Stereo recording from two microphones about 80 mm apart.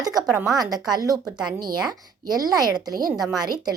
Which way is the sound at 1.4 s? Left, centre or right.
Right.